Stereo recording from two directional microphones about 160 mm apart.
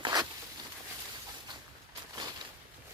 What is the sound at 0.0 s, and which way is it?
Zipper, 25° right (ahead or behind).